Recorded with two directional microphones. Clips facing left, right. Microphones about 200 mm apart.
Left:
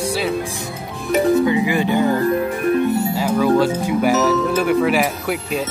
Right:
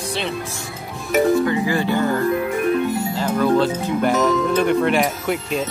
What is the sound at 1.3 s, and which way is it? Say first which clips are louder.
Speech: left 2 dB; 15° left (ahead or behind).